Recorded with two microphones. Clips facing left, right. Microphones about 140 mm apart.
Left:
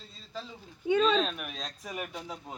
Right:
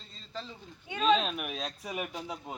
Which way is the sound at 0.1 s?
5° left (ahead or behind).